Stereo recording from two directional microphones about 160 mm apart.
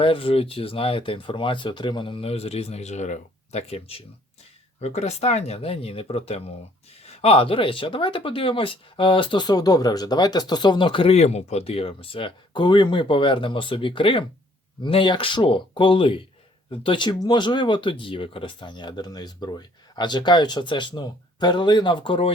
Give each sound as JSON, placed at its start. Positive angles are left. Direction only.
{"t": 0.0, "sound": "speech", "side_deg": 35}